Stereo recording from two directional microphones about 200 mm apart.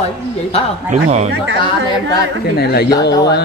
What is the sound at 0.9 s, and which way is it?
Speech, 35° right (ahead or behind).